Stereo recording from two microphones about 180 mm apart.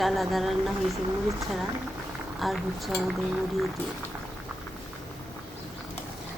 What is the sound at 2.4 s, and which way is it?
Speech, centre (ahead or behind).